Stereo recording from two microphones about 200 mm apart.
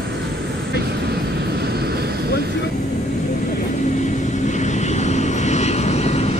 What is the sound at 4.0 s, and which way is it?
Vehicle, 35° left (ahead or behind).